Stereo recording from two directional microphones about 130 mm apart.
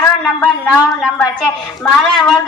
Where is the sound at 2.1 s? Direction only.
5° left (ahead or behind).